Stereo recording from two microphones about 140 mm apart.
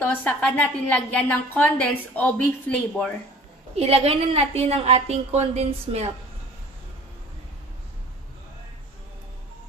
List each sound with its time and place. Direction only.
0.0 s a woman's voice: 10° left (ahead or behind)
3.7 s a woman's voice: 45° right (ahead or behind)